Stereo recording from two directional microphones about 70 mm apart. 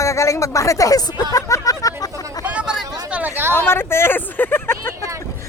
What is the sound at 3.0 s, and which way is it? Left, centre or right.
Hubbub, centre.